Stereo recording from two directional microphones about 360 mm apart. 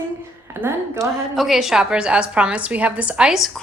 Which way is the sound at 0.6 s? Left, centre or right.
Centre.